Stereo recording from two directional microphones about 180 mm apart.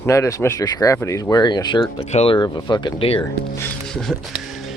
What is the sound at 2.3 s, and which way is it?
Speech, 25° left (ahead or behind).